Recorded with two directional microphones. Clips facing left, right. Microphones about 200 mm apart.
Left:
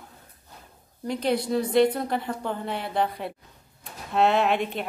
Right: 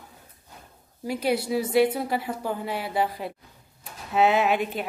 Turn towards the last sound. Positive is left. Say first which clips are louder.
# even
turn(degrees=-5)  # may be behind; listen again after turning